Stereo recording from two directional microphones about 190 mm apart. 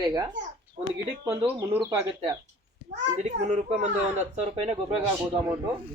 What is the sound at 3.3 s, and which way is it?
Speech, 40° right (ahead or behind).